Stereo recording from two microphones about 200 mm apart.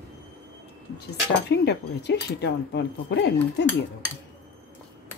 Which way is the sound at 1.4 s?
55° left (ahead or behind).